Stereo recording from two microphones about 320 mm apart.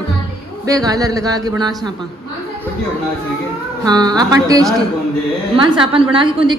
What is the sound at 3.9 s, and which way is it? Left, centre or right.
A woman's voice, centre.